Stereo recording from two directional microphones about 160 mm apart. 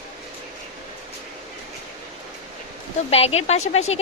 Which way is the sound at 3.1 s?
40° left (ahead or behind).